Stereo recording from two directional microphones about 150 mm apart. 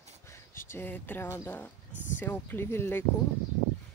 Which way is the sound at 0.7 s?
15° left (ahead or behind).